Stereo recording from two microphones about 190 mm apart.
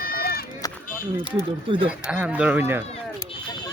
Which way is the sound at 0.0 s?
50° left (ahead or behind).